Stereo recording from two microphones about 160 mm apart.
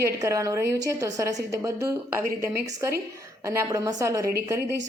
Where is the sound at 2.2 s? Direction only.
75° right (ahead or behind).